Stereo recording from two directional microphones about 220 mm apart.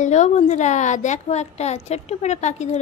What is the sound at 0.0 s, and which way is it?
A woman's voice, 30° left (ahead or behind).